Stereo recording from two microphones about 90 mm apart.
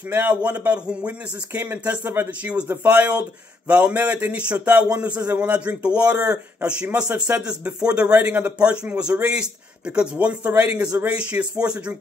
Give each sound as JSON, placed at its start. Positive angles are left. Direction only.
{"t": 0.1, "sound": "a man's voice", "side_deg": -15}